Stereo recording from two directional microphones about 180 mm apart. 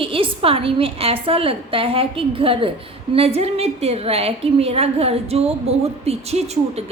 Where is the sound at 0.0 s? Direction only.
30° right (ahead or behind).